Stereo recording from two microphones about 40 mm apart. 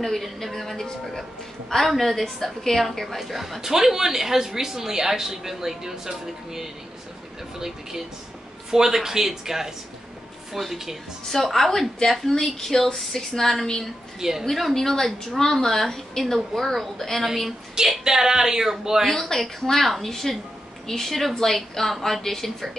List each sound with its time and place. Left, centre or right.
0.0 s speech: centre
1.9 s a woman's voice: centre
11.2 s a woman's voice: centre
19.0 s a woman's voice: centre